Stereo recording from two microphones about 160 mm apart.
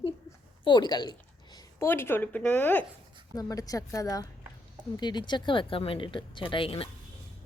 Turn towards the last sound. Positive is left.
turn(degrees=35)  # may be behind; listen again after turning